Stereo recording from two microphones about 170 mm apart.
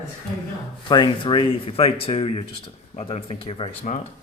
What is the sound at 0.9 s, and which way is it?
Speech, 25° left (ahead or behind).